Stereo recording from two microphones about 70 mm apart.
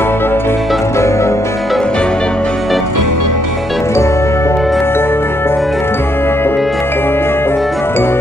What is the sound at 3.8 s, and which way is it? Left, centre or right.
Music, left.